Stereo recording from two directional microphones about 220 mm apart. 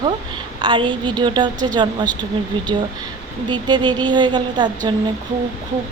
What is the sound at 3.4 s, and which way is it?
Speech, 20° right (ahead or behind).